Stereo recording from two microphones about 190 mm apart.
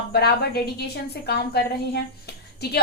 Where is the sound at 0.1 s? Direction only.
60° left (ahead or behind).